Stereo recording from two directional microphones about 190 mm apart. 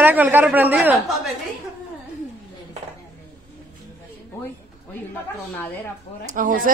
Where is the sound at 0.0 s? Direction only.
10° right (ahead or behind).